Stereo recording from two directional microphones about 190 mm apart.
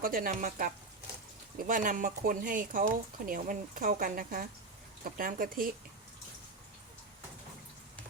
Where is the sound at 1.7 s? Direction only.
45° right (ahead or behind).